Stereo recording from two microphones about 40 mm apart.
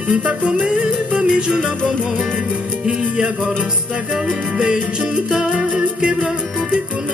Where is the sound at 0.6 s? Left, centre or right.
Right.